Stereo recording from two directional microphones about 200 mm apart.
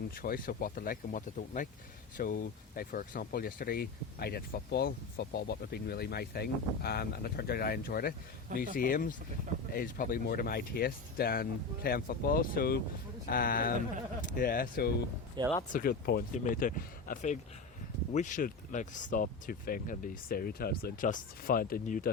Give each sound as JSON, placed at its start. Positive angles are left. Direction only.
{"t": 0.2, "sound": "speech", "side_deg": 45}
{"t": 15.4, "sound": "speech", "side_deg": -20}
{"t": 15.7, "sound": "speech", "side_deg": 45}